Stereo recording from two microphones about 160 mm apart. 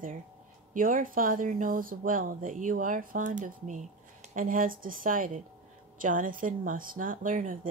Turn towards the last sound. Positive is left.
turn(degrees=-55)  # may be behind; listen again after turning